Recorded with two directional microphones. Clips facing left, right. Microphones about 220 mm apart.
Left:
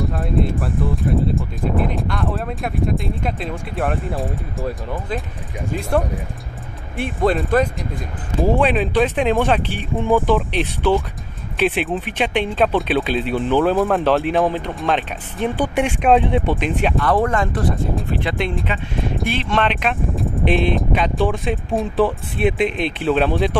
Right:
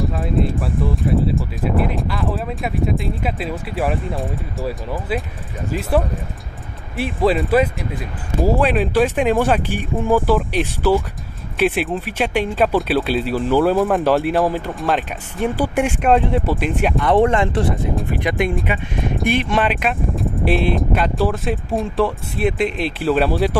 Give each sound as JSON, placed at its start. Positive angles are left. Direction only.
{"t": 0.0, "sound": "speech", "side_deg": 0}
{"t": 17.0, "sound": "speech", "side_deg": -25}
{"t": 18.1, "sound": "speech", "side_deg": -15}